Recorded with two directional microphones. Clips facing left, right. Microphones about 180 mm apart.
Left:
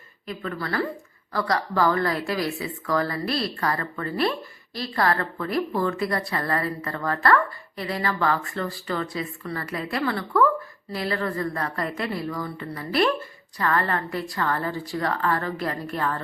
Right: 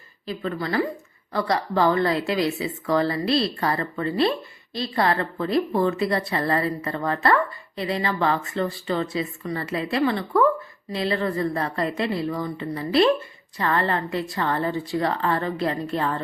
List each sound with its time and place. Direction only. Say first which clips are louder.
0.3 s speech: right 3 dB; 25° right (ahead or behind)